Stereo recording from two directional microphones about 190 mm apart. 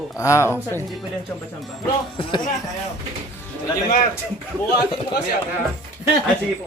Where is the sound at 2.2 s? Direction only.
25° left (ahead or behind).